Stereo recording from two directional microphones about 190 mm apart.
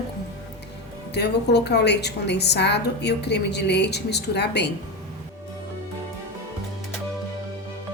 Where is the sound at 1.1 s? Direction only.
60° left (ahead or behind).